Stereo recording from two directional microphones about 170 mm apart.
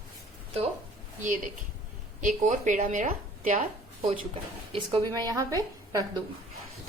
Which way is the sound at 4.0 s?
40° right (ahead or behind).